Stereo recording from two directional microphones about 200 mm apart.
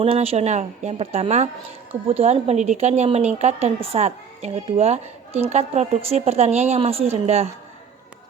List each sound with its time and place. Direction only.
0.0 s a woman's voice: 30° right (ahead or behind)